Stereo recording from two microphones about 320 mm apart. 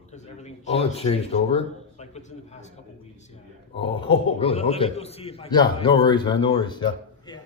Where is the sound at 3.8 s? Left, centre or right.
Centre.